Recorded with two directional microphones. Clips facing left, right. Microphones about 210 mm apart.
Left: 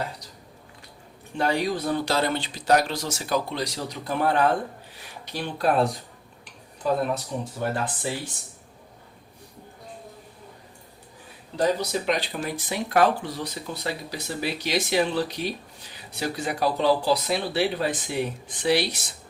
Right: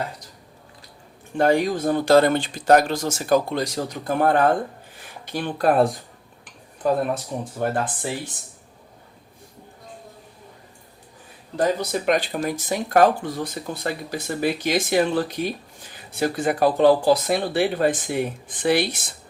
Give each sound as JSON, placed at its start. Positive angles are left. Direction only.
{"t": 1.4, "sound": "speech", "side_deg": -50}
{"t": 11.5, "sound": "speech", "side_deg": -50}